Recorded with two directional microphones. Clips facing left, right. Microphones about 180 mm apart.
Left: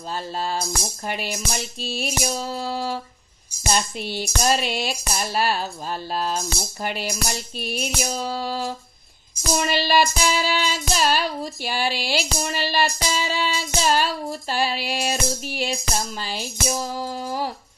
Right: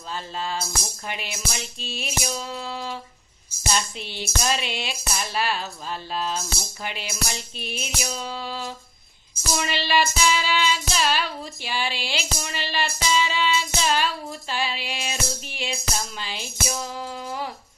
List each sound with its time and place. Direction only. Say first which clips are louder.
0.1 s music: left 3 dB; 40° left (ahead or behind)
3.7 s speech: left 4 dB; 45° left (ahead or behind)
4.4 s music: left 5 dB; 40° left (ahead or behind)
9.6 s speech: left 3 dB; 45° left (ahead or behind)
10.2 s music: left 1 dB; 45° left (ahead or behind)